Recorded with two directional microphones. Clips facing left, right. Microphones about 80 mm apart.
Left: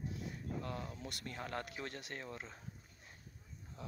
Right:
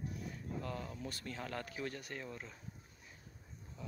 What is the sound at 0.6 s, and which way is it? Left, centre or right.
Speech, left.